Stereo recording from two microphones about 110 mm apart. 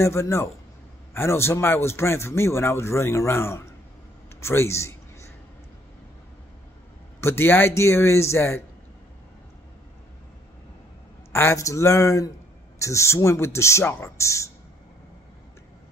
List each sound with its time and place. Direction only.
0.0 s speech: 25° left (ahead or behind)
7.2 s speech: 20° left (ahead or behind)
11.3 s speech: 25° left (ahead or behind)